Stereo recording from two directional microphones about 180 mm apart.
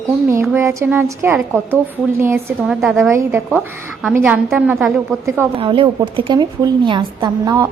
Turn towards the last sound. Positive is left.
turn(degrees=-20)  # may be behind; listen again after turning